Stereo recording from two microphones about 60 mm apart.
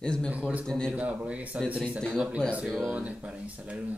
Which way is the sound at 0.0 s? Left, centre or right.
Centre.